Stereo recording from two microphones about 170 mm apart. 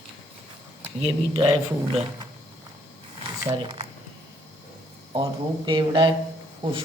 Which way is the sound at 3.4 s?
30° right (ahead or behind).